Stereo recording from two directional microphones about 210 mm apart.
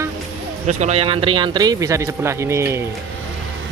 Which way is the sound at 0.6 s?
35° right (ahead or behind).